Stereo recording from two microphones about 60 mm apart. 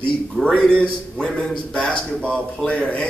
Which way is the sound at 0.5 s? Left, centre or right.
Centre.